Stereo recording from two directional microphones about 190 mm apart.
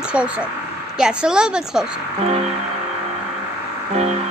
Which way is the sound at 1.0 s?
5° right (ahead or behind).